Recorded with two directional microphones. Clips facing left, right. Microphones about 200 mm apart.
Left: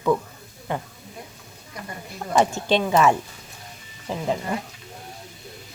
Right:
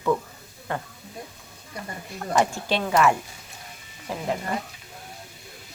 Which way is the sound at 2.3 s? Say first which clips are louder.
Left 4 dB; 25° left (ahead or behind).